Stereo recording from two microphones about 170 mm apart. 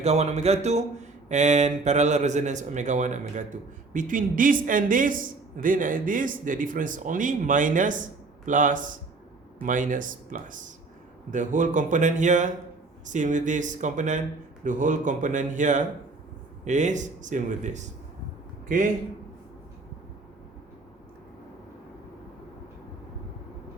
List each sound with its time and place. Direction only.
0.0 s speech: 40° right (ahead or behind)